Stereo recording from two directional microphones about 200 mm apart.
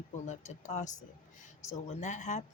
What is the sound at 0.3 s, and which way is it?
Speech, 35° left (ahead or behind).